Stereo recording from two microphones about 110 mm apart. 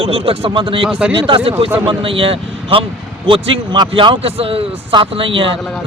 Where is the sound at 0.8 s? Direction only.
10° right (ahead or behind).